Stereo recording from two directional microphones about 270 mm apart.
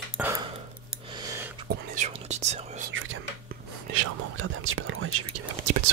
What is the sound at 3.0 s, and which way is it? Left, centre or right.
Whispering, right.